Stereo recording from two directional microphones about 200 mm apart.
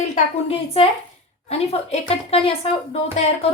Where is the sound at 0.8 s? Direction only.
30° left (ahead or behind).